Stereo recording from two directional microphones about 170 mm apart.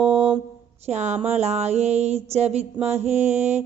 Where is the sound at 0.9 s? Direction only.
40° right (ahead or behind).